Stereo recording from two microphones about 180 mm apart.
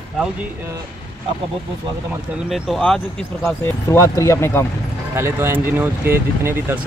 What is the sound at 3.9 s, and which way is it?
Speech, 15° left (ahead or behind).